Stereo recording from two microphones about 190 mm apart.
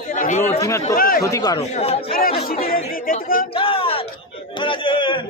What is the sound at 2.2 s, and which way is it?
Speech, 50° left (ahead or behind).